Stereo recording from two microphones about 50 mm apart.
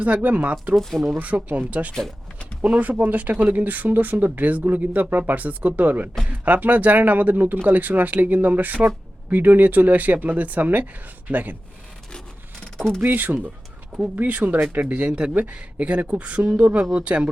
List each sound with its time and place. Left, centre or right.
0.0 s speech: right
0.8 s speech: centre
1.2 s speech: right
13.0 s speech: right